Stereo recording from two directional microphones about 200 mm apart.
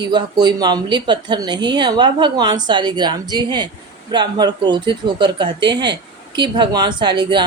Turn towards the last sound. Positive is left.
turn(degrees=-20)  # may be behind; listen again after turning